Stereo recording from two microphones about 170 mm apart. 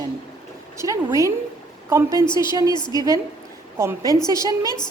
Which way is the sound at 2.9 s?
20° right (ahead or behind).